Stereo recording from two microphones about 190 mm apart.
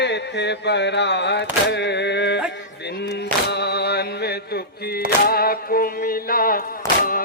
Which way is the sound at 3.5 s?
60° left (ahead or behind).